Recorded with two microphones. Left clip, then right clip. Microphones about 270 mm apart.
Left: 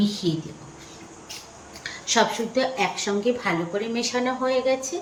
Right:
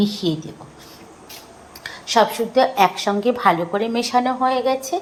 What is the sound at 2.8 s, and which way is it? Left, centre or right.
Speech, right.